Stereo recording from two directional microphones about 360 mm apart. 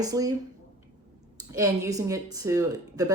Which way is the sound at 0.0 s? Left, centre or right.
Centre.